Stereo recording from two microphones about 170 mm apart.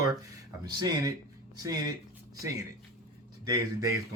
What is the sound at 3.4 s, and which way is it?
Speech, 20° right (ahead or behind).